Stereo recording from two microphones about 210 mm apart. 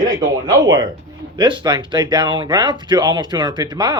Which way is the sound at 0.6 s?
20° right (ahead or behind).